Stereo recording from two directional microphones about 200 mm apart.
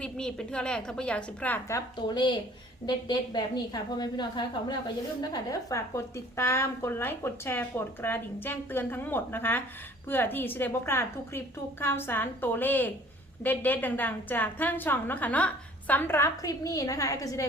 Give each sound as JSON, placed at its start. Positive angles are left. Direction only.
{"t": 0.0, "sound": "a woman's voice", "side_deg": 5}